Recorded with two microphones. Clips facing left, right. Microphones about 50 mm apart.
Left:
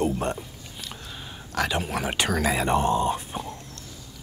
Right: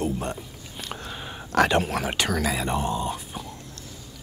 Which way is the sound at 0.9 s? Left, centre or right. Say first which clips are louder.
Right 4 dB; right.